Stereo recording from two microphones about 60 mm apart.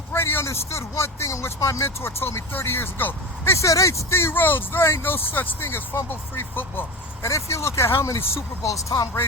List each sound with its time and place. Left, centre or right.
0.1 s speech: left
3.5 s speech: left
4.1 s speech: left
7.2 s speech: left
8.7 s speech: left